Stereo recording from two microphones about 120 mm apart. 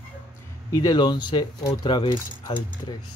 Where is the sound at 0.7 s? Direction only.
35° left (ahead or behind).